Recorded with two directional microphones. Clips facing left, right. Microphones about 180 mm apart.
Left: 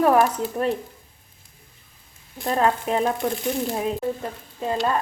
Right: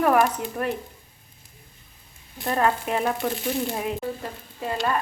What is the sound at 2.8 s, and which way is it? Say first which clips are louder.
Speech: left 3 dB; 20° left (ahead or behind).